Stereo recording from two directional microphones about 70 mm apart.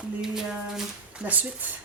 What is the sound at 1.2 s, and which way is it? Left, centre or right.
Speech, right.